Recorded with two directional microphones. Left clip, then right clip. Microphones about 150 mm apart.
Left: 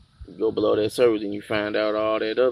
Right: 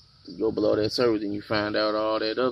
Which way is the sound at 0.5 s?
10° right (ahead or behind).